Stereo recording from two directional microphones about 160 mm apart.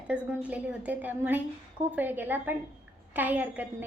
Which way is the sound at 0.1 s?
10° right (ahead or behind).